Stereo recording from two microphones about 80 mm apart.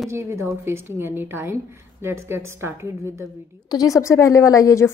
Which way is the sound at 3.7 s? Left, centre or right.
Left.